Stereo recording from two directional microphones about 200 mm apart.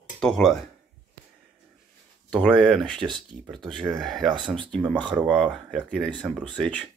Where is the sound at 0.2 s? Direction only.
Centre (ahead or behind).